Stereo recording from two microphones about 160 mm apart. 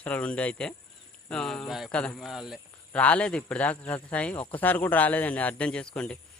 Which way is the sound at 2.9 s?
10° left (ahead or behind).